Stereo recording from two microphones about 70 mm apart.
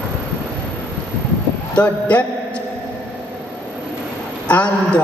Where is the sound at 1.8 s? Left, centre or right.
Centre.